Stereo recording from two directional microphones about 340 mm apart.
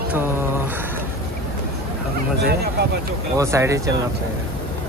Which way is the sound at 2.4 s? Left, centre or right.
Right.